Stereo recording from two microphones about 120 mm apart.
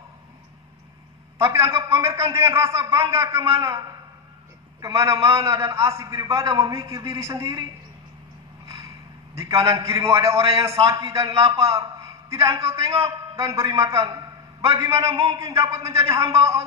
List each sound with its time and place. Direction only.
1.4 s a man's voice: 20° right (ahead or behind)
4.8 s a man's voice: 25° right (ahead or behind)
8.6 s a sound: 25° right (ahead or behind)
9.7 s a man's voice: 25° right (ahead or behind)
10.3 s a man's voice: 55° right (ahead or behind)
10.9 s a man's voice: 25° right (ahead or behind)